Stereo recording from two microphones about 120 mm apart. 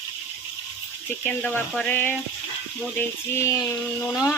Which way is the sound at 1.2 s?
15° left (ahead or behind).